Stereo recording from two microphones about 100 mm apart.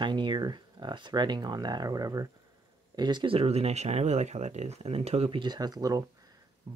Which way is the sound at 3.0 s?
50° right (ahead or behind).